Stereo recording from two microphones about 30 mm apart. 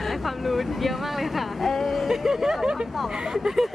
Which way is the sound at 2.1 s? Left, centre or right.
Centre.